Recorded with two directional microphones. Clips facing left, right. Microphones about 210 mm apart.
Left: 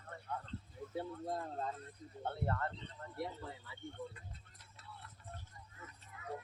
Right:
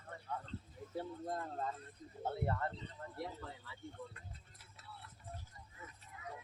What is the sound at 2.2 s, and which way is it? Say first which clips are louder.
Speech: right 1 dB; 10° right (ahead or behind).